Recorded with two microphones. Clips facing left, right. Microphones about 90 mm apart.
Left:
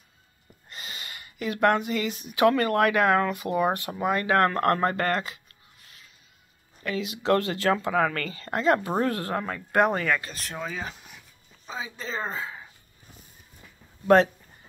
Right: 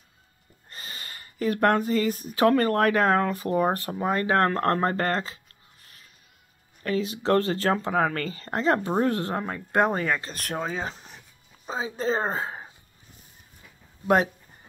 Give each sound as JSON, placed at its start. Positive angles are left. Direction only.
{"t": 0.7, "sound": "speech", "side_deg": -40}
{"t": 6.8, "sound": "speech", "side_deg": -40}
{"t": 14.0, "sound": "speech", "side_deg": -15}